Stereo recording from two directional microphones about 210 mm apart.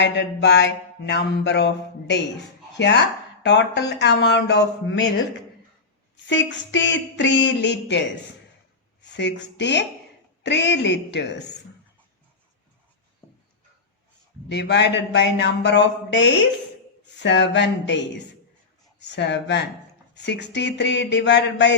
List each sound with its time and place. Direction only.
0.0 s mantra: 55° left (ahead or behind)
2.7 s speech: 55° left (ahead or behind)
3.4 s mantra: 55° left (ahead or behind)
6.2 s mantra: 60° left (ahead or behind)
9.1 s mantra: 55° left (ahead or behind)
14.5 s mantra: 55° left (ahead or behind)